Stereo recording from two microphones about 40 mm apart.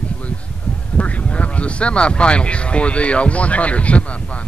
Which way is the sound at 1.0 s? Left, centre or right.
Left.